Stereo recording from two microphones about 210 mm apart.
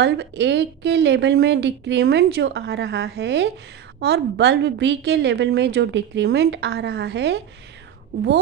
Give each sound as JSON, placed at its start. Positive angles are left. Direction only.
{"t": 0.0, "sound": "a woman's voice", "side_deg": -55}